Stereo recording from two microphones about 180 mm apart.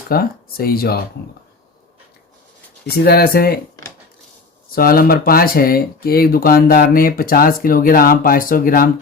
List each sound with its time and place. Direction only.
0.1 s speech: 55° left (ahead or behind)
3.0 s speech: 60° left (ahead or behind)
4.7 s speech: 55° left (ahead or behind)